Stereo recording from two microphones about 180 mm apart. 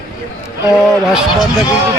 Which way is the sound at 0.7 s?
Centre (ahead or behind).